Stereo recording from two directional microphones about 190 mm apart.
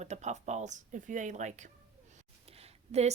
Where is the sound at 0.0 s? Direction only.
35° right (ahead or behind).